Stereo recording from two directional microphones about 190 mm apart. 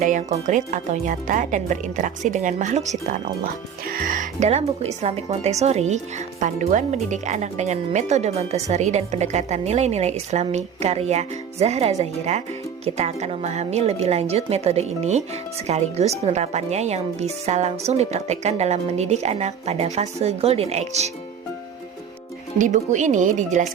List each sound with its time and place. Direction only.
0.0 s speech: 40° right (ahead or behind)
22.5 s speech: 40° right (ahead or behind)